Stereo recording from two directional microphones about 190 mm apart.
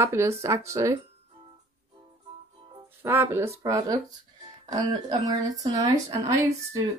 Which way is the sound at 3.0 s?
10° right (ahead or behind).